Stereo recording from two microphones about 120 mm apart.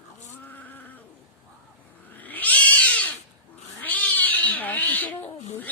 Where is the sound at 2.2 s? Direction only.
15° left (ahead or behind).